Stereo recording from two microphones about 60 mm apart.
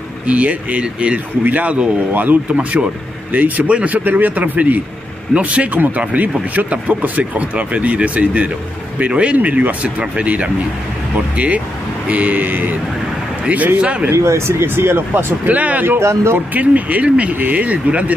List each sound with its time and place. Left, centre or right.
0.3 s a man's voice: right
14.1 s speech: right
15.4 s a man's voice: right
16.0 s speech: right
16.5 s a man's voice: right